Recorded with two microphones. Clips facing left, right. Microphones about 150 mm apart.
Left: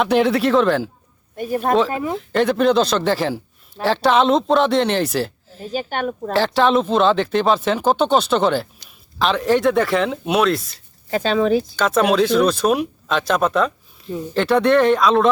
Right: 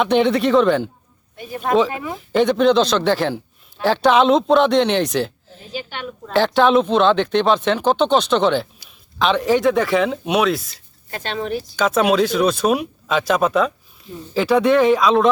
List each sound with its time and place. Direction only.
0.0 s speech: centre (ahead or behind)
1.4 s a woman's voice: 45° left (ahead or behind)
1.9 s speech: 35° left (ahead or behind)
2.1 s speech: centre (ahead or behind)
5.7 s a woman's voice: 45° left (ahead or behind)
6.3 s speech: centre (ahead or behind)